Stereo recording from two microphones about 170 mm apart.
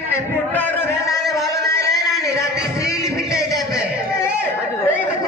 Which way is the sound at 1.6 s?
20° left (ahead or behind).